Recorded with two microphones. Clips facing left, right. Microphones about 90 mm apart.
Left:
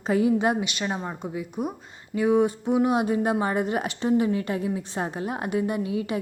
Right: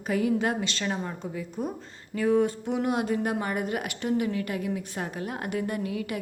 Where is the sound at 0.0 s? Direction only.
25° left (ahead or behind).